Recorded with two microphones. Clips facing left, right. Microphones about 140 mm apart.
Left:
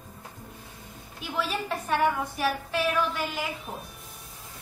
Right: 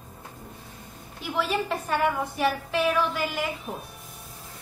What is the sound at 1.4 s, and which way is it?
A woman's voice, centre (ahead or behind).